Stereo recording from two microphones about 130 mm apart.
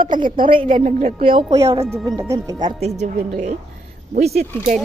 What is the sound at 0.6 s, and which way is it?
Speech, 75° right (ahead or behind).